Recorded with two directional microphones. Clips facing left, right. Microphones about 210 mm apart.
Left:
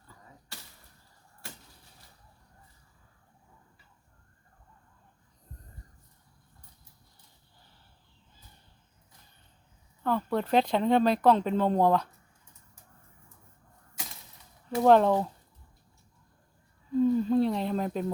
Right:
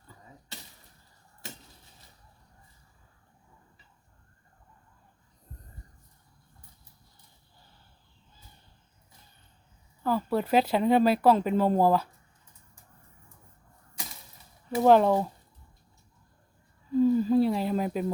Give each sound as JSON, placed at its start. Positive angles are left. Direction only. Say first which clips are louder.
{"t": 0.1, "sound": "arrow", "louder": "right 3 dB", "side_deg": -20}
{"t": 10.0, "sound": "speech", "louder": "right 1 dB", "side_deg": -5}
{"t": 14.7, "sound": "speech", "louder": "right 1 dB", "side_deg": -5}
{"t": 16.9, "sound": "a sound", "louder": "right 2 dB", "side_deg": -5}